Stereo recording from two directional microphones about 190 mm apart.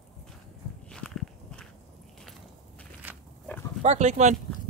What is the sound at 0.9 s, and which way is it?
Walk, 5° left (ahead or behind).